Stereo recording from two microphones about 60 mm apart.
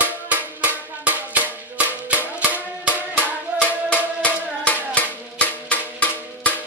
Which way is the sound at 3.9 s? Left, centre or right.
Left.